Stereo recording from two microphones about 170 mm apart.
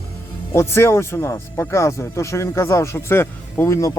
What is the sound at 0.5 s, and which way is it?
Speech, 15° left (ahead or behind).